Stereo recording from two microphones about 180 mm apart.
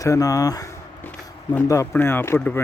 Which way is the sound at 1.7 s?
15° left (ahead or behind).